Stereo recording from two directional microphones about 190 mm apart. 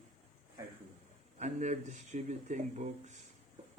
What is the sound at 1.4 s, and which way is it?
A man's voice, 40° right (ahead or behind).